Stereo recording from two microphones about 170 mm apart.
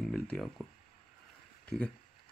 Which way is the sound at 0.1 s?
Centre (ahead or behind).